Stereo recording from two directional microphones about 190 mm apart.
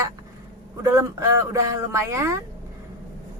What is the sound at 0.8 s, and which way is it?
A woman's voice, 15° right (ahead or behind).